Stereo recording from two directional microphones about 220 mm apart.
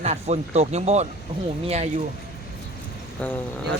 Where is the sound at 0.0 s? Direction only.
30° right (ahead or behind).